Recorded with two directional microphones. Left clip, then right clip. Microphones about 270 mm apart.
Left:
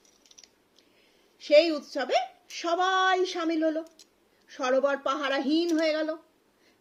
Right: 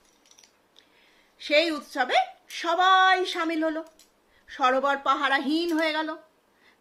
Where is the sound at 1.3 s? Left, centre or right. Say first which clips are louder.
Left 2 dB; centre.